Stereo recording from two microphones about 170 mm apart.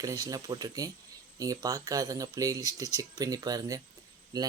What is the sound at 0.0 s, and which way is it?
Speech, 20° right (ahead or behind).